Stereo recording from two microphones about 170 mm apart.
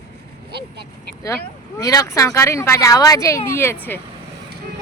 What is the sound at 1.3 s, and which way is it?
Speech, 20° left (ahead or behind).